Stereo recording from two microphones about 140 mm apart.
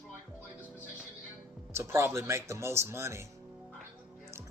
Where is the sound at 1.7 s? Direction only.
20° right (ahead or behind).